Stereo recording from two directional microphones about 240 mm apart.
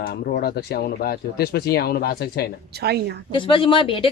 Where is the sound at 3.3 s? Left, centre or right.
Left.